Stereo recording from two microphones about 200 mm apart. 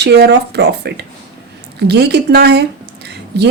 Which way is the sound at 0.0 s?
55° right (ahead or behind).